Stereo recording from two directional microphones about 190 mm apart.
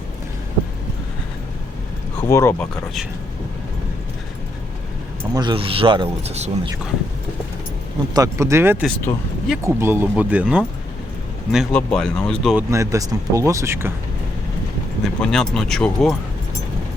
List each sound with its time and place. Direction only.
2.2 s speech: 15° left (ahead or behind)
5.3 s speech: 25° right (ahead or behind)
8.1 s speech: 15° right (ahead or behind)
11.5 s speech: 5° left (ahead or behind)
12.5 s speech: 15° right (ahead or behind)
15.0 s speech: 5° left (ahead or behind)